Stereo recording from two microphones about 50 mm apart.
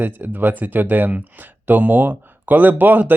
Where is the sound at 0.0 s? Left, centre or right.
Right.